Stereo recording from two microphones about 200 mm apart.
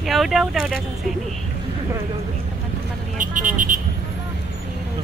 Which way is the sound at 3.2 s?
40° right (ahead or behind).